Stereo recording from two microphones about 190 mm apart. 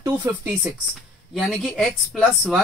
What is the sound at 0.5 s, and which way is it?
A woman's voice, centre (ahead or behind).